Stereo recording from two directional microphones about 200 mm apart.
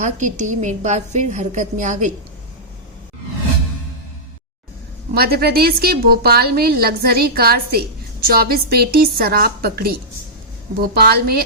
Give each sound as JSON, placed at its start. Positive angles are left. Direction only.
{"t": 0.0, "sound": "a woman's voice", "side_deg": -40}
{"t": 5.1, "sound": "a woman's voice", "side_deg": -50}